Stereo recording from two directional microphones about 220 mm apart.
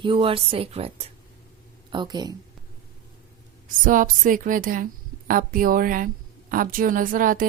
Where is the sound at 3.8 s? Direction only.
35° right (ahead or behind).